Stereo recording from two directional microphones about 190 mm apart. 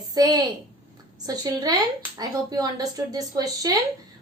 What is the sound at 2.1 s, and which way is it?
Speech, 20° right (ahead or behind).